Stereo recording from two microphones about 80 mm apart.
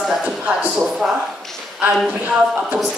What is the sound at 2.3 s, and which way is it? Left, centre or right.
Speech, centre.